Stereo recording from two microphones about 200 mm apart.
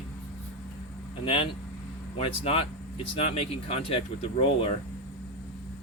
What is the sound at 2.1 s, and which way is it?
Speech, 30° left (ahead or behind).